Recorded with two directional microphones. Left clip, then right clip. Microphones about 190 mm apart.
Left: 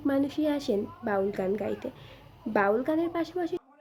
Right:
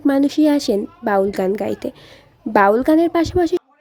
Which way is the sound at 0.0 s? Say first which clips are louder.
Right 12 dB; 45° right (ahead or behind).